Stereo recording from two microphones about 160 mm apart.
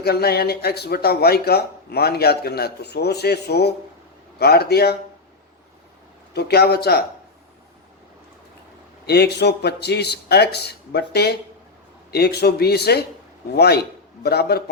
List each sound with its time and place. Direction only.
0.0 s speech: 75° left (ahead or behind)
4.4 s speech: 80° left
6.3 s speech: 85° left
9.0 s a man's voice: 90° left